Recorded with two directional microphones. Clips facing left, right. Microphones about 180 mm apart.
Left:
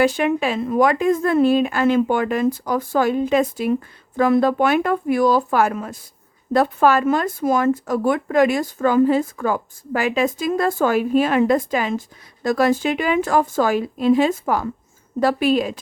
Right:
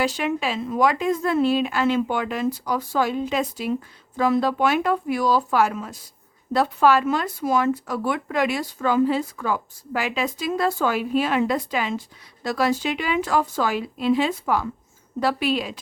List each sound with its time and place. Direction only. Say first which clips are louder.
0.0 s speech: left 6 dB; 55° left (ahead or behind)